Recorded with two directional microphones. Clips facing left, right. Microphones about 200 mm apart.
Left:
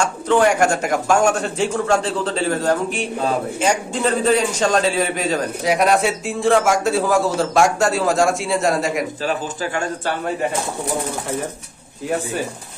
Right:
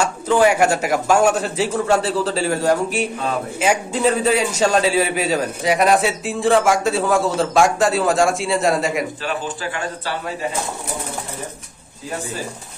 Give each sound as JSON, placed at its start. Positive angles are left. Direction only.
{"t": 0.0, "sound": "a man's voice", "side_deg": -5}
{"t": 9.2, "sound": "a man's voice", "side_deg": 40}